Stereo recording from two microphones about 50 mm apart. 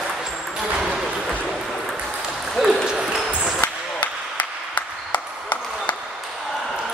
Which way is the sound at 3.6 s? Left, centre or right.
Left.